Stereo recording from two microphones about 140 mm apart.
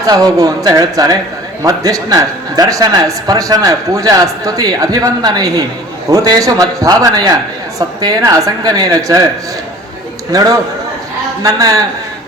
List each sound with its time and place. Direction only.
0.0 s a man's voice: 25° right (ahead or behind)
10.3 s a man's voice: 25° right (ahead or behind)